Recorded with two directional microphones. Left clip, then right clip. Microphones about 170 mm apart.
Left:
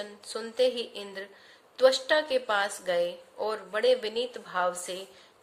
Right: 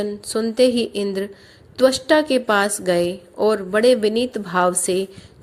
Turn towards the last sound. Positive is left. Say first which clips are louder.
# right 11 dB
turn(degrees=-35)  # may be behind; listen again after turning